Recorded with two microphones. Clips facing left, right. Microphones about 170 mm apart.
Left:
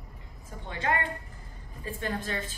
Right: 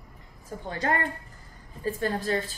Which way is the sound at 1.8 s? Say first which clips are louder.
Right 6 dB; 40° right (ahead or behind).